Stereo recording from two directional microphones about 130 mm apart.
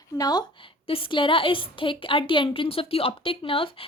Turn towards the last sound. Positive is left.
turn(degrees=45)  # may be behind; listen again after turning